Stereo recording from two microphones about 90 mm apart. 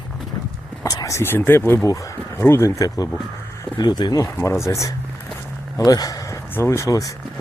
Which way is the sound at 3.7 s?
55° left (ahead or behind).